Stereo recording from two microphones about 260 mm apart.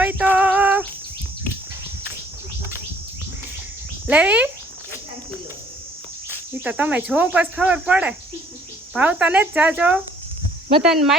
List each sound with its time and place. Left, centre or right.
0.0 s female singing: centre
4.0 s speech: centre
6.5 s speech: centre